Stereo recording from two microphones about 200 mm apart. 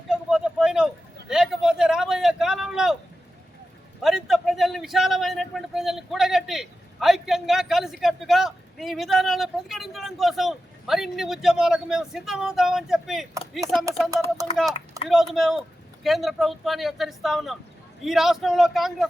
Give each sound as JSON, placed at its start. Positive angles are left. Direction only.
{"t": 0.1, "sound": "a sound", "side_deg": -5}
{"t": 4.0, "sound": "a man's voice", "side_deg": 0}
{"t": 15.0, "sound": "a man's voice", "side_deg": 0}